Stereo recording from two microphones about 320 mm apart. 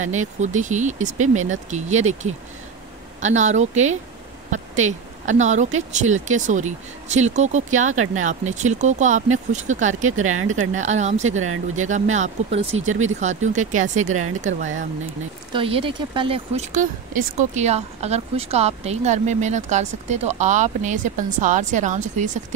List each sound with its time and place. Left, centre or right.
0.1 s speech: right
10.2 s speech: right
10.5 s speech: right
11.3 s speech: right
11.9 s speech: right
15.5 s speech: centre